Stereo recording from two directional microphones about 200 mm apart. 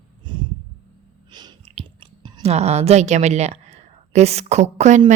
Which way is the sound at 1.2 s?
20° right (ahead or behind).